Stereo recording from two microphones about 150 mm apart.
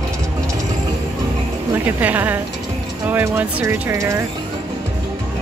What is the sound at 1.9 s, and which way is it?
Speech, 10° right (ahead or behind).